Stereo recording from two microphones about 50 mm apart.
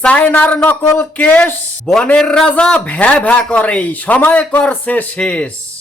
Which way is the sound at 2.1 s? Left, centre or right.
Centre.